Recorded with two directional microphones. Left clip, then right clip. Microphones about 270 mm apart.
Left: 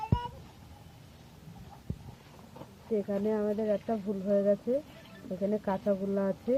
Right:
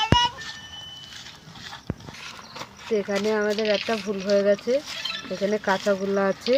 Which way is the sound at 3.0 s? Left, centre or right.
Right.